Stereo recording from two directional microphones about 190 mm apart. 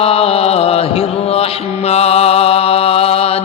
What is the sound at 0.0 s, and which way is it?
Mantra, 30° left (ahead or behind).